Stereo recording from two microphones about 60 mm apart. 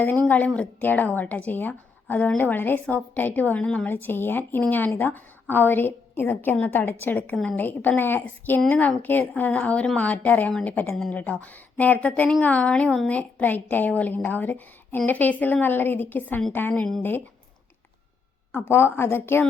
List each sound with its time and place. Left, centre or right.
0.0 s a woman's voice: left
3.8 s a woman's voice: left
18.5 s a woman's voice: left